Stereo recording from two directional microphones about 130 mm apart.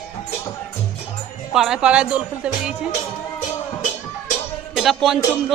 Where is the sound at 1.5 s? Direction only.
5° right (ahead or behind).